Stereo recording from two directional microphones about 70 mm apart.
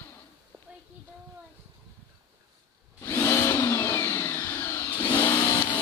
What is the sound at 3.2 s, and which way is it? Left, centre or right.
Vehicle, left.